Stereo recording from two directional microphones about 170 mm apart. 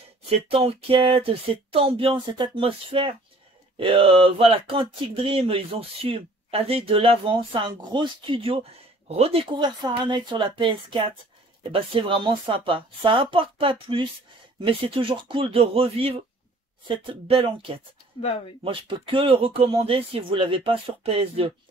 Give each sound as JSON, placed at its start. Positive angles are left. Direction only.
{"t": 0.3, "sound": "speech", "side_deg": -35}